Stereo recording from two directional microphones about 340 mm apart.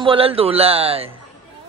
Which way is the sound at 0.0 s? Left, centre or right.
Centre.